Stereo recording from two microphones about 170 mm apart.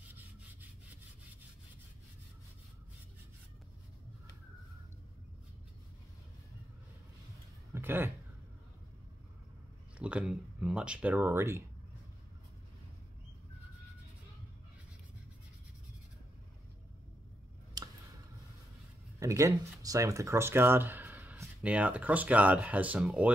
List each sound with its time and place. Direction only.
0.1 s wood: 10° right (ahead or behind)
7.7 s speech: 15° right (ahead or behind)
9.9 s speech: 5° right (ahead or behind)
17.8 s a sound: 25° right (ahead or behind)
19.1 s speech: 20° right (ahead or behind)